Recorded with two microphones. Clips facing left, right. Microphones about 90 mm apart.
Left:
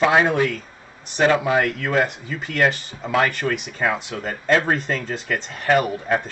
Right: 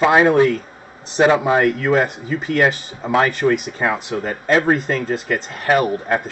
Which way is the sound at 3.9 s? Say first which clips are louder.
Right 4 dB; 5° right (ahead or behind).